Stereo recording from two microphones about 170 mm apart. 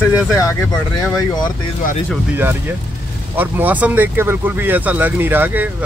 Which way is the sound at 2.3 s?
10° right (ahead or behind).